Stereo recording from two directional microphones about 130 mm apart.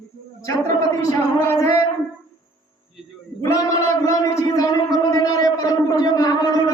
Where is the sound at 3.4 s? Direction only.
25° left (ahead or behind).